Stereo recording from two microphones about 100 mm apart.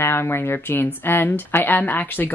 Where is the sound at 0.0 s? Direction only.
25° left (ahead or behind).